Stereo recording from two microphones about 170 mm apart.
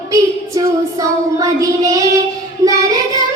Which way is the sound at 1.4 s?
20° right (ahead or behind).